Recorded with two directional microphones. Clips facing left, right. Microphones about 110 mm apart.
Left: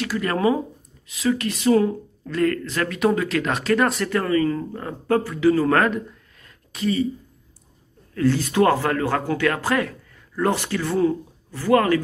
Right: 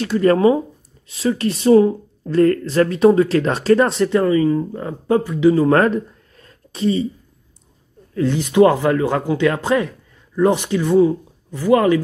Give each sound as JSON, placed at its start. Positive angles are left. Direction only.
{"t": 0.0, "sound": "speech", "side_deg": -30}
{"t": 5.8, "sound": "a sound", "side_deg": -35}
{"t": 8.1, "sound": "speech", "side_deg": -20}